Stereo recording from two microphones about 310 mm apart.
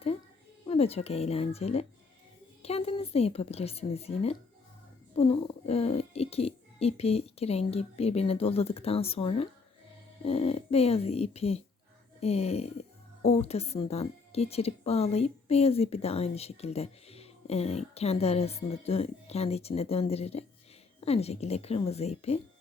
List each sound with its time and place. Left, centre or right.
0.6 s a woman's voice: centre